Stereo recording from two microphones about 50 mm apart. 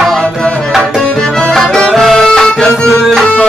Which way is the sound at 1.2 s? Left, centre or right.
Centre.